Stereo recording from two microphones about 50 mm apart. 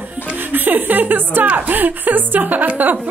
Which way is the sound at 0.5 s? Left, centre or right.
Right.